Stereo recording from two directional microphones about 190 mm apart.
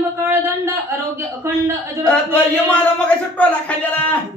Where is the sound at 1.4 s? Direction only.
15° right (ahead or behind).